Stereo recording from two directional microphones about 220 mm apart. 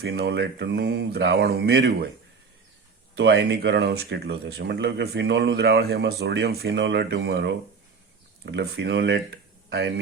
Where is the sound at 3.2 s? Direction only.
50° right (ahead or behind).